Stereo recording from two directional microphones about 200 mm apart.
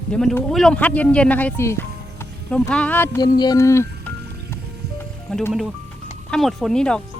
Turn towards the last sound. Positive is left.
turn(degrees=5)  # may be behind; listen again after turning